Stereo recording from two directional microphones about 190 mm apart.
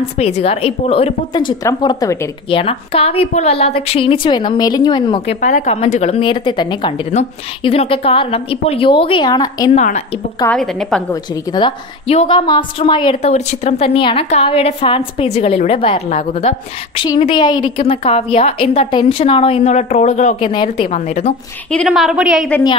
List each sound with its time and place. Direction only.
0.2 s a woman's voice: 30° left (ahead or behind)
5.4 s a woman's voice: 35° left (ahead or behind); by 9.7 s 20° left (ahead or behind)
9.8 s speech: 40° left (ahead or behind)
10.4 s a woman's voice: 5° left (ahead or behind)
11.5 s a woman's voice: 30° left (ahead or behind)
20.3 s a woman's voice: 25° left (ahead or behind)
21.7 s a woman's voice: centre (ahead or behind)